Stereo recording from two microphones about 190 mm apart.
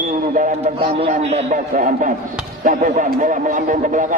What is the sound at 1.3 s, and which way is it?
Speech, 45° right (ahead or behind).